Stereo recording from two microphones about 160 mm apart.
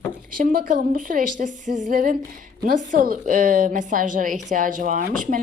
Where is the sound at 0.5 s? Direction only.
60° right (ahead or behind).